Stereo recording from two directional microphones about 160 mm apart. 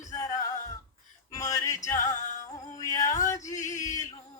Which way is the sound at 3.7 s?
20° left (ahead or behind).